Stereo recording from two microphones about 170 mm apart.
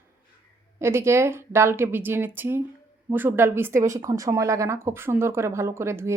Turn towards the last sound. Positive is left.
turn(degrees=-15)  # may be behind; listen again after turning